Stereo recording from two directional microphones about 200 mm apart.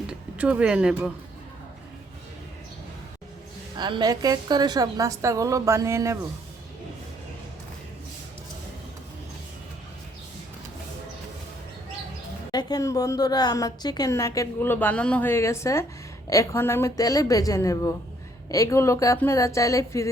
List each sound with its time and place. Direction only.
0.1 s speech: 5° right (ahead or behind)
3.8 s a woman's voice: 20° right (ahead or behind)
12.5 s a woman's voice: 20° left (ahead or behind)